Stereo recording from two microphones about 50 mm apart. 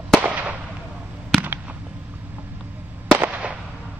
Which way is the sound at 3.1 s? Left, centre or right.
Right.